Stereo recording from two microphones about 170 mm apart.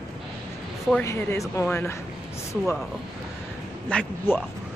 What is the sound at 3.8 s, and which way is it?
Speech, 10° left (ahead or behind).